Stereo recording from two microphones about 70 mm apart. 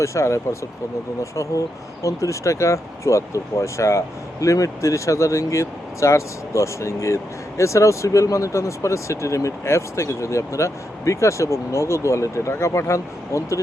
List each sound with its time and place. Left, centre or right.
0.0 s speech: left